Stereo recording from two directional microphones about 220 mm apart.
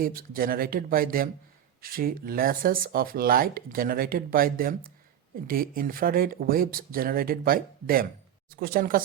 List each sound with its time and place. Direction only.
0.0 s speech: 40° right (ahead or behind)